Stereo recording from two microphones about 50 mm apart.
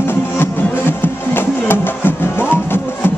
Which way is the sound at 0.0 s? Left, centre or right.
Left.